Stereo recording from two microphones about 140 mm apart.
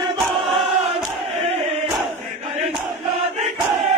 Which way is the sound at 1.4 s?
45° right (ahead or behind).